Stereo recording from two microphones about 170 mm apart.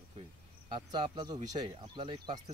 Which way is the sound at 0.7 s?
25° right (ahead or behind).